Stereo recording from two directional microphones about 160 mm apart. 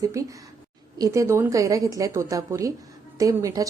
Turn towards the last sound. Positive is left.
turn(degrees=-20)  # may be behind; listen again after turning